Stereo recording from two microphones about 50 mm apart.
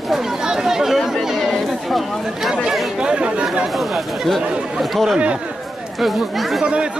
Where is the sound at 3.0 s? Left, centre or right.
Centre.